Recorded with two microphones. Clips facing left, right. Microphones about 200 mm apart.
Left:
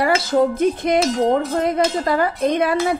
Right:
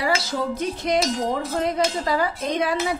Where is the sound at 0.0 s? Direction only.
55° left (ahead or behind).